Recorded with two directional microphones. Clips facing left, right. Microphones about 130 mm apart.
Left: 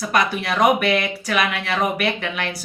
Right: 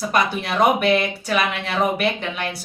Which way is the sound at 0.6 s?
25° right (ahead or behind).